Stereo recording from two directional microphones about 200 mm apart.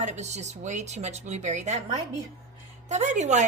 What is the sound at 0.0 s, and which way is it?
A woman's voice, 35° right (ahead or behind).